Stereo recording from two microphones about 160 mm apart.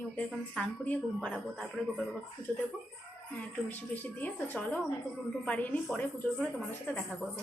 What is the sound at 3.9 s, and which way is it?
A woman's voice, 10° left (ahead or behind).